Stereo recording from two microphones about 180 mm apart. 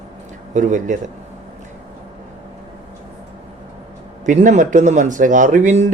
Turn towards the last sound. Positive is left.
turn(degrees=-45)  # may be behind; listen again after turning